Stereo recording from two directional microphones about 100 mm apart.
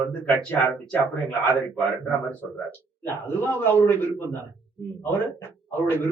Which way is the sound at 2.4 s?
20° left (ahead or behind).